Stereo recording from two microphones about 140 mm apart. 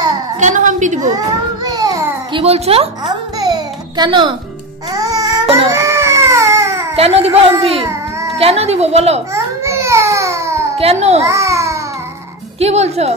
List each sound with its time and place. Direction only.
0.4 s a woman's voice: 65° right (ahead or behind)
1.1 s a sound: 25° right (ahead or behind)
2.3 s a woman's voice: 45° right (ahead or behind)
3.3 s a sound: 30° right (ahead or behind)
4.9 s baby cry: 25° right (ahead or behind)
7.0 s a woman's voice: 45° right (ahead or behind)
8.4 s a woman's voice: 45° right (ahead or behind)
9.3 s babbling: 20° right (ahead or behind)
10.8 s a woman's voice: 45° right (ahead or behind)
11.2 s a child's voice: 20° right (ahead or behind)
12.5 s a woman's voice: 50° right (ahead or behind)